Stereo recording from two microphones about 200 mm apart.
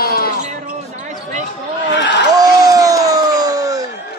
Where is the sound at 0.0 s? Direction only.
50° left (ahead or behind).